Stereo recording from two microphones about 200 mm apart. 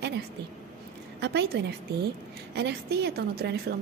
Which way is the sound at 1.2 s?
60° right (ahead or behind).